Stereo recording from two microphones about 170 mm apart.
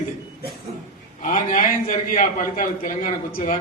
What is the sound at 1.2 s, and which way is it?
A man's voice, 50° left (ahead or behind).